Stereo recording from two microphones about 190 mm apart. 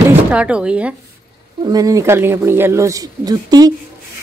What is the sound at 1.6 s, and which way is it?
Speech, 20° right (ahead or behind).